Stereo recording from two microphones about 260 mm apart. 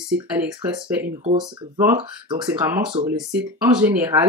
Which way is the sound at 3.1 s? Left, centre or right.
Centre.